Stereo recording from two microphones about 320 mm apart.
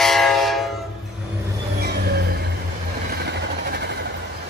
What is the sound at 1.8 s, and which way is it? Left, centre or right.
Vehicle, right.